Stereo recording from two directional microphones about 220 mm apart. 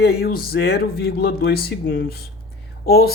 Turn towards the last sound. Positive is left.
turn(degrees=45)  # may be behind; listen again after turning